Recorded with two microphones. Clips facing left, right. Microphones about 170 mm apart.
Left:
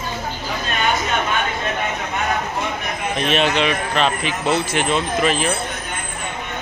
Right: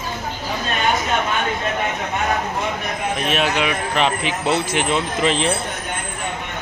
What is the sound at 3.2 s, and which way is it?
A man's voice, 5° right (ahead or behind).